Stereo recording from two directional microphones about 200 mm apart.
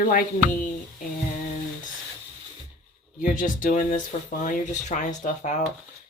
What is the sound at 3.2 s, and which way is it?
Speech, 40° left (ahead or behind).